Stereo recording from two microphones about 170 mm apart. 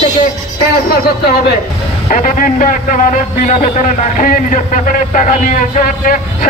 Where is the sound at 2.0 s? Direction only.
50° left (ahead or behind).